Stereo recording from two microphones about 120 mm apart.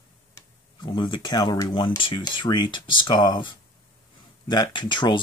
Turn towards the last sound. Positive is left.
turn(degrees=40)  # may be behind; listen again after turning